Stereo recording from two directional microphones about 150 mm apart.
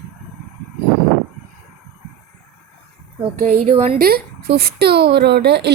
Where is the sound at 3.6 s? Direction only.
45° right (ahead or behind).